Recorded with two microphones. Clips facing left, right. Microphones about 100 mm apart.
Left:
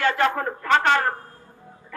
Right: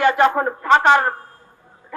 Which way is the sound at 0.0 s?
20° right (ahead or behind).